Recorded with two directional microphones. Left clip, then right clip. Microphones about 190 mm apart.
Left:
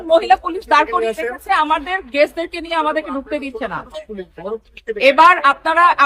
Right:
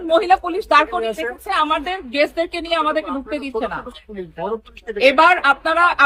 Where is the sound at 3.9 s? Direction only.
45° left (ahead or behind).